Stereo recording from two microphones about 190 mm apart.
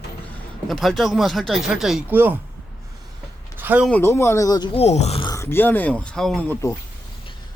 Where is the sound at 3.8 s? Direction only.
10° left (ahead or behind); by 5.3 s 30° left (ahead or behind).